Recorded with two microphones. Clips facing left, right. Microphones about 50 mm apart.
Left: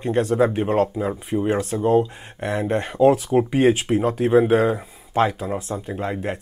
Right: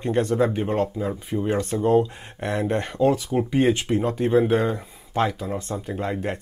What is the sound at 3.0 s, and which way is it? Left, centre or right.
Speech, left.